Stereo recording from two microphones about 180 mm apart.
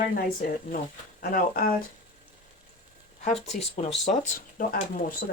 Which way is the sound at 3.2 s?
40° left (ahead or behind).